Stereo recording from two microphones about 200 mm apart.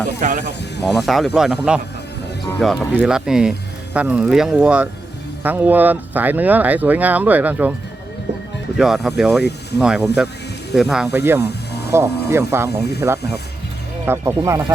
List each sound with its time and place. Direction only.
0.2 s speech: 40° right (ahead or behind)
0.9 s speech: centre (ahead or behind)
8.8 s speech: centre (ahead or behind)
11.1 s speech: 15° right (ahead or behind)